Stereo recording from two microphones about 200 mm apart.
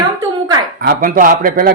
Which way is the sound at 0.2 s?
15° right (ahead or behind).